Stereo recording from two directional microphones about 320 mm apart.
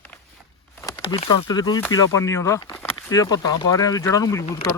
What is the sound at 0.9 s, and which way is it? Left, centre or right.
Speech, centre.